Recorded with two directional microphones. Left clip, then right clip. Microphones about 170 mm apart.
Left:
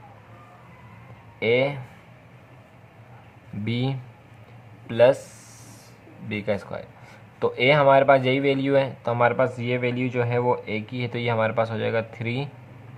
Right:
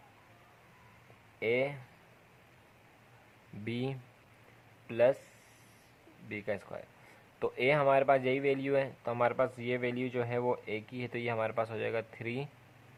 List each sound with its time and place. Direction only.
1.4 s speech: 35° right (ahead or behind)
3.6 s speech: 35° right (ahead or behind)
6.2 s speech: 25° right (ahead or behind)